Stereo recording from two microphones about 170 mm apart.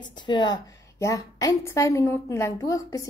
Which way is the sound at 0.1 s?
25° left (ahead or behind).